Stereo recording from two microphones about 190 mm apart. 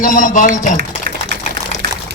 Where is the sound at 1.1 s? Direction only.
60° right (ahead or behind).